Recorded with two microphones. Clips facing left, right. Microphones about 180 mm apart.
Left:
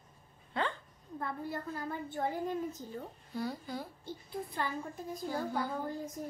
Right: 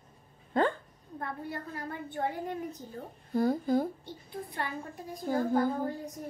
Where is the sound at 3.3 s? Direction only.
50° right (ahead or behind).